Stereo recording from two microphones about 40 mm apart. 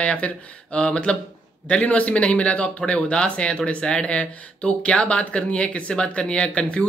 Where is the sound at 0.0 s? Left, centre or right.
Left.